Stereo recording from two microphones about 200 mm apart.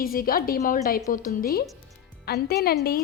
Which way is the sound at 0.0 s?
45° left (ahead or behind).